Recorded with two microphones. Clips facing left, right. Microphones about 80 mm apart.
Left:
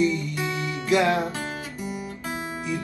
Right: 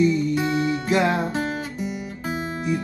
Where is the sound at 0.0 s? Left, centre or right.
Right.